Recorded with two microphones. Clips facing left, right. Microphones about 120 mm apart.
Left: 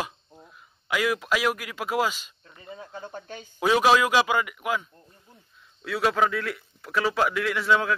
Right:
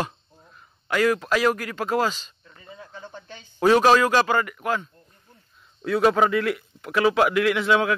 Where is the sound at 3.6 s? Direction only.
10° left (ahead or behind).